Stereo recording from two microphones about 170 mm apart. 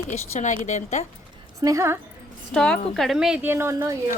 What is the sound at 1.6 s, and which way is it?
Speech, 15° right (ahead or behind).